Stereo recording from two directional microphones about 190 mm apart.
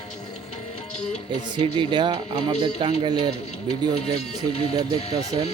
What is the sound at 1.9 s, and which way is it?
Speech, 25° right (ahead or behind).